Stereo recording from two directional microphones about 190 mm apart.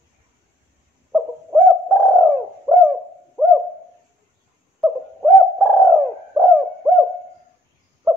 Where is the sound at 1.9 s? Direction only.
Centre (ahead or behind).